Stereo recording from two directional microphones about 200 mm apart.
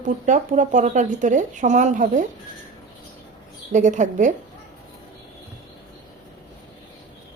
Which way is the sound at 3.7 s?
35° right (ahead or behind).